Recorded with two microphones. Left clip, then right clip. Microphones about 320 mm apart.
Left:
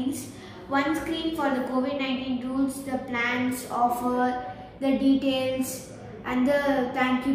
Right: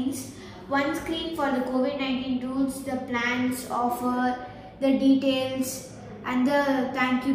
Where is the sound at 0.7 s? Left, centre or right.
Centre.